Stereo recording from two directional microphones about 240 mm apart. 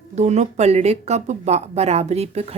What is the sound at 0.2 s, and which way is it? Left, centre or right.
A woman's voice, right.